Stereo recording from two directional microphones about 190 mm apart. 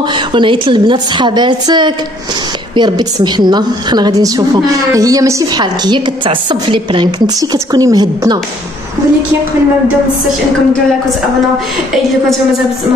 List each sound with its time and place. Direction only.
0.3 s a woman's voice: 25° right (ahead or behind)